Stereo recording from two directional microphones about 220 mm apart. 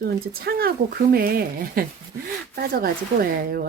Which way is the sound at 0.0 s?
45° right (ahead or behind).